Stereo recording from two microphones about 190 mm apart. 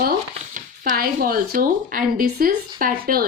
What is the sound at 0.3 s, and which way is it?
A woman's voice, 45° right (ahead or behind).